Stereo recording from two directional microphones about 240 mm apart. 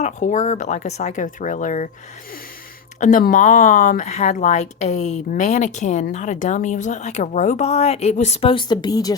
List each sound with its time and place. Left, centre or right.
0.0 s speech: left
3.0 s speech: left; by 9.1 s centre